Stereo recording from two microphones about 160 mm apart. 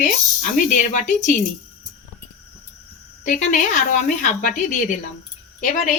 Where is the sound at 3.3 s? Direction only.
55° left (ahead or behind).